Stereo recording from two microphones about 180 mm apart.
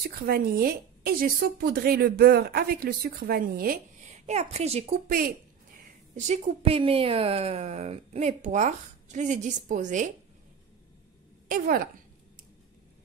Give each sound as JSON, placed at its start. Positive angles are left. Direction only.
{"t": 0.0, "sound": "a woman's voice", "side_deg": -60}
{"t": 4.1, "sound": "speech", "side_deg": -40}
{"t": 5.0, "sound": "speech", "side_deg": -50}
{"t": 6.1, "sound": "a woman's voice", "side_deg": -40}
{"t": 11.4, "sound": "a woman's voice", "side_deg": -50}